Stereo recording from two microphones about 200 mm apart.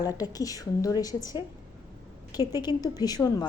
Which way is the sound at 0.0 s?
20° left (ahead or behind).